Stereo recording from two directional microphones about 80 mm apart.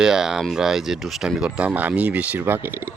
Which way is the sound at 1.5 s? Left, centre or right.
Centre.